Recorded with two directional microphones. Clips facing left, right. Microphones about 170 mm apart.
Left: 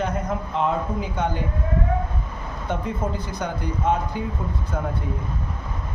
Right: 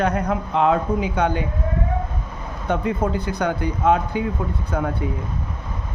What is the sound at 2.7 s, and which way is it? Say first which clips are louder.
Speech: right 5 dB; 70° right (ahead or behind).